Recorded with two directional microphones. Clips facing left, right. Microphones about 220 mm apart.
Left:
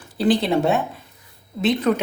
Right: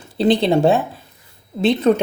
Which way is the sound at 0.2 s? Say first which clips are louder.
Right 3 dB; 25° right (ahead or behind).